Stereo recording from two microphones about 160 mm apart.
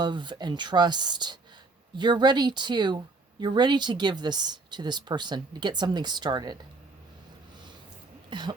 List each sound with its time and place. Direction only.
0.0 s speech: 30° right (ahead or behind)
8.3 s cough: 30° right (ahead or behind)